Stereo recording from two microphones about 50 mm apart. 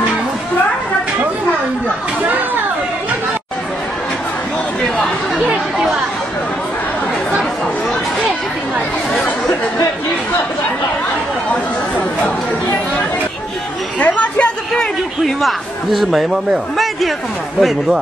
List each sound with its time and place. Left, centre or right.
5.0 s chatter: centre
13.9 s chatter: left
14.7 s a sound: centre
15.4 s a man's voice: centre